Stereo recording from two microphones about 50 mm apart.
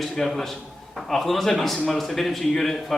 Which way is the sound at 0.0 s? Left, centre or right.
Centre.